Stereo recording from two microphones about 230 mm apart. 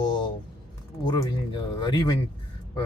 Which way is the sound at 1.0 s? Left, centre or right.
Centre.